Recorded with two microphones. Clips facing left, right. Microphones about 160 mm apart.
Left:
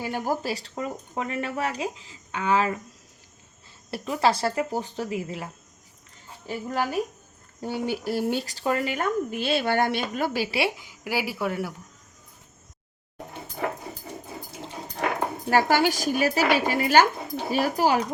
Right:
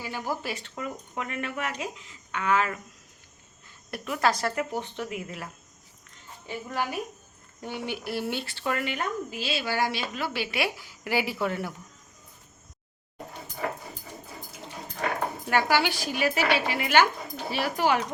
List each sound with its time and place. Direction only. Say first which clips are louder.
0.0 s speech: left 5 dB; 50° left (ahead or behind)
0.4 s speech: left 4 dB; 35° left (ahead or behind)
3.9 s speech: left 3 dB; 30° left (ahead or behind)
6.5 s speech: left 4 dB; 40° left (ahead or behind)
9.3 s a woman's voice: left 6 dB; 55° left (ahead or behind); by 10.7 s 35° left (ahead or behind)
11.0 s speech: even; 10° left (ahead or behind)
15.4 s speech: left 4 dB; 40° left (ahead or behind)